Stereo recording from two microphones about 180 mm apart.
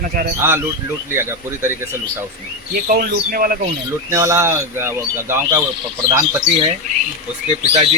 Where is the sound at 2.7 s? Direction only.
55° right (ahead or behind).